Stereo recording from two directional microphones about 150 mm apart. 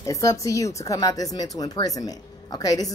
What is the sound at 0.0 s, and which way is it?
A woman's voice, 20° left (ahead or behind).